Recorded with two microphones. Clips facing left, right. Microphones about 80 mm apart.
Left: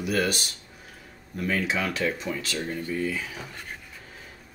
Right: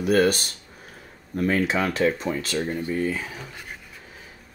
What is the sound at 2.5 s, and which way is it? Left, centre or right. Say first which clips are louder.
Speech: right 4 dB; right.